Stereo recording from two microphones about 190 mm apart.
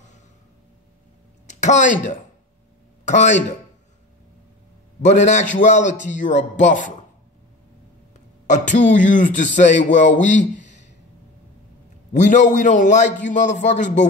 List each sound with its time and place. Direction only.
1.5 s speech: 40° left (ahead or behind)
5.0 s speech: 40° left (ahead or behind)
8.5 s speech: 40° left (ahead or behind)
12.1 s speech: 40° left (ahead or behind)